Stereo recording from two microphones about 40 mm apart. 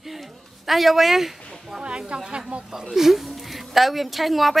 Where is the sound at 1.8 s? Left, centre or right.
Right.